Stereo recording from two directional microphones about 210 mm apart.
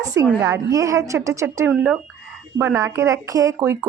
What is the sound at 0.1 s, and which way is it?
Speech, 15° right (ahead or behind).